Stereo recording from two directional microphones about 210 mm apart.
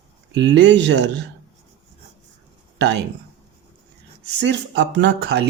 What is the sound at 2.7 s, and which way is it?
Speech, 55° right (ahead or behind).